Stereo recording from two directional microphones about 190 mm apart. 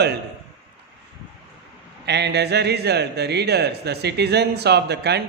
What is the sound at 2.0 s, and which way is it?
Speech, 60° right (ahead or behind).